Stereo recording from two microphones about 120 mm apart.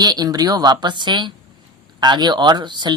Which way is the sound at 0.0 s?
35° right (ahead or behind).